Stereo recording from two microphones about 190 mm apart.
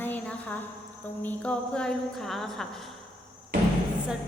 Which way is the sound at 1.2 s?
10° left (ahead or behind).